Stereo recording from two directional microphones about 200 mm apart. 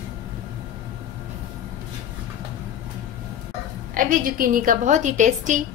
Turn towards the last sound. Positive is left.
turn(degrees=-40)  # may be behind; listen again after turning